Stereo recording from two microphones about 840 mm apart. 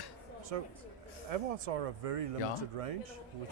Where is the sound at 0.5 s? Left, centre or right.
Right.